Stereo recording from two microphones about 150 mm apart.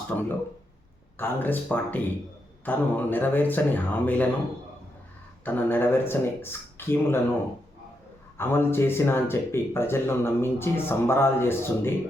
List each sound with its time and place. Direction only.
0.1 s speech: 15° left (ahead or behind)
5.5 s speech: 15° left (ahead or behind)
8.4 s speech: 15° left (ahead or behind)